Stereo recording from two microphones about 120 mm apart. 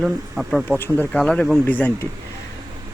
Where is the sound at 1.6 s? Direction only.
15° left (ahead or behind).